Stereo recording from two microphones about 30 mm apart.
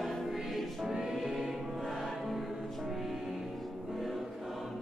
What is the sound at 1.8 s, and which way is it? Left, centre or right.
Music, centre.